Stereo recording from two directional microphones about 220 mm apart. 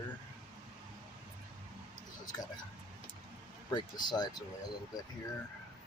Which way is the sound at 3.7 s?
20° left (ahead or behind).